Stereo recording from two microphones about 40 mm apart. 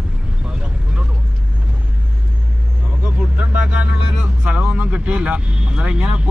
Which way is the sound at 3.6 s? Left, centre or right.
Right.